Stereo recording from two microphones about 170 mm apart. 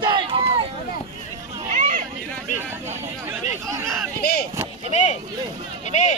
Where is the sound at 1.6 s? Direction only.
50° right (ahead or behind).